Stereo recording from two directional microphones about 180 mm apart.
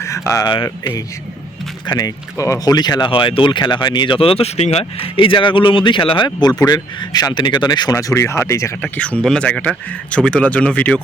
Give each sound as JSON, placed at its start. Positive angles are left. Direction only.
{"t": 0.0, "sound": "speech", "side_deg": 15}